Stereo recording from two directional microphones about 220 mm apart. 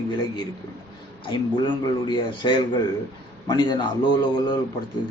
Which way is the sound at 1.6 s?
20° left (ahead or behind).